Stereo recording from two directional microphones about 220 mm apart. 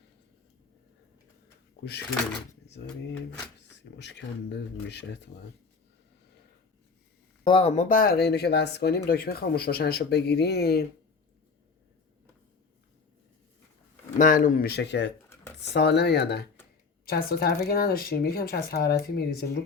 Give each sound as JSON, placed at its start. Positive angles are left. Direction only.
{"t": 2.8, "sound": "speech", "side_deg": 45}
{"t": 3.9, "sound": "speech", "side_deg": 50}
{"t": 7.4, "sound": "speech", "side_deg": 25}
{"t": 14.2, "sound": "speech", "side_deg": 35}